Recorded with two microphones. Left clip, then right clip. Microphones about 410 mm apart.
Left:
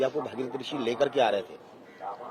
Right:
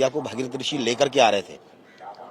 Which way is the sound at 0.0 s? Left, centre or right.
Right.